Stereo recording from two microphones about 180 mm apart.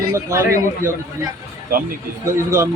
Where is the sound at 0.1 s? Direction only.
15° right (ahead or behind).